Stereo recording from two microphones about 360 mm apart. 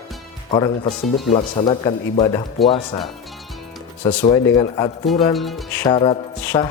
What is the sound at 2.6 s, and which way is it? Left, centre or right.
Speech, centre.